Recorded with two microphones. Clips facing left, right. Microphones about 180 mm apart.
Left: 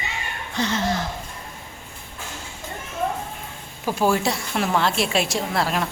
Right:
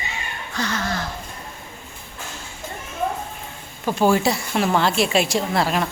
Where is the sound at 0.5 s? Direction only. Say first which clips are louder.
Left 2 dB; 25° left (ahead or behind).